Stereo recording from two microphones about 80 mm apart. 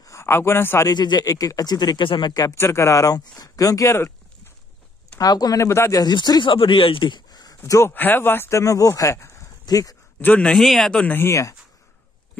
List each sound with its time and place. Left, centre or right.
0.0 s speech: left
0.8 s speech: left
2.5 s speech: left
5.2 s speech: left
5.7 s speech: left
5.9 s speech: left
7.9 s speech: left
9.7 s speech: left
10.2 s speech: centre
10.5 s speech: centre
11.0 s speech: left